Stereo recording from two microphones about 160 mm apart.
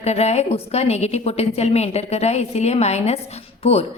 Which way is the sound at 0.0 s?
40° left (ahead or behind).